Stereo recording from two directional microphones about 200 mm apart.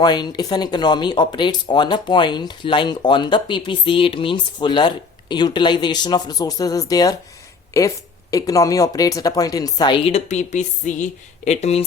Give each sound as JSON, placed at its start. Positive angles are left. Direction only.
{"t": 0.0, "sound": "speech", "side_deg": 20}